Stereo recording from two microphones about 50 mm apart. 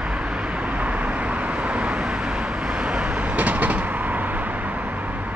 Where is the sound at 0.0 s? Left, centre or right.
Right.